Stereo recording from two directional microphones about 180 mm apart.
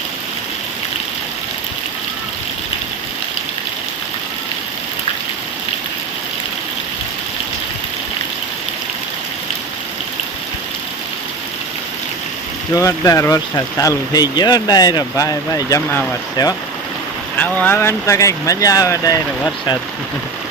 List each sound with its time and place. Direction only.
12.7 s speech: 15° left (ahead or behind)
17.3 s speech: 10° left (ahead or behind)